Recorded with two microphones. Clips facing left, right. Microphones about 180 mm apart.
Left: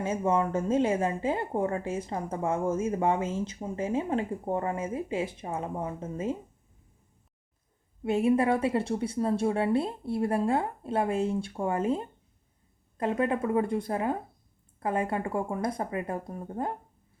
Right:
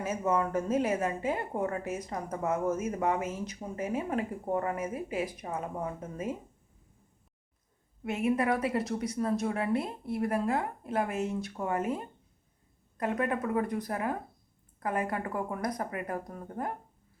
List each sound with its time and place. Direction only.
0.0 s a woman's voice: 30° left (ahead or behind)
8.0 s a woman's voice: 30° left (ahead or behind)